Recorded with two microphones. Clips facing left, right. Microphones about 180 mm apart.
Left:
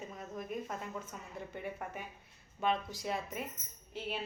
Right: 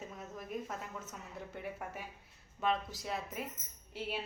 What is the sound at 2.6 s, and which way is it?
Speech, centre (ahead or behind).